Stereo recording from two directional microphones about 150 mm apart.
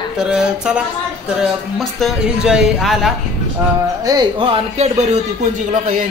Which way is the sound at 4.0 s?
25° right (ahead or behind).